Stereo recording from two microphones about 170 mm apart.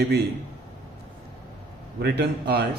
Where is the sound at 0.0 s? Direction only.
70° right (ahead or behind).